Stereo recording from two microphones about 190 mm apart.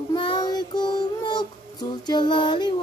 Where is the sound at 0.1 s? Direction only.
25° left (ahead or behind).